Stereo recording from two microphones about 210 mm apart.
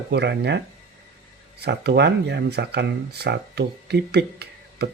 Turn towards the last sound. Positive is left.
turn(degrees=-50)  # may be behind; listen again after turning